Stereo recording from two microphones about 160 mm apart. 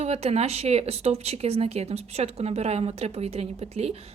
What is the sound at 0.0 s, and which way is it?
Speech, 40° right (ahead or behind).